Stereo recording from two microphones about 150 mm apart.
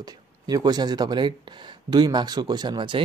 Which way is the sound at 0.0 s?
25° right (ahead or behind).